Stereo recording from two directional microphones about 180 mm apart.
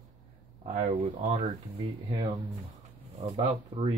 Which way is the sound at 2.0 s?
25° right (ahead or behind).